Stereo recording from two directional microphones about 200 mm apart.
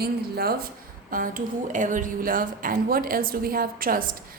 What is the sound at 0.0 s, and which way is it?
A woman's voice, 50° right (ahead or behind).